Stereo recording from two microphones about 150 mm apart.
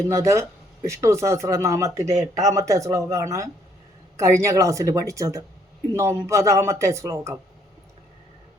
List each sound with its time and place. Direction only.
0.1 s speech: 20° right (ahead or behind)